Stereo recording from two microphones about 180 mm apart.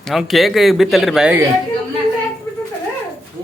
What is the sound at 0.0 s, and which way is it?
Speech, centre (ahead or behind).